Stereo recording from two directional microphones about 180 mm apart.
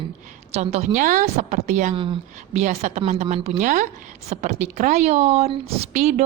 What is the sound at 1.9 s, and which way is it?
Speech, 30° right (ahead or behind).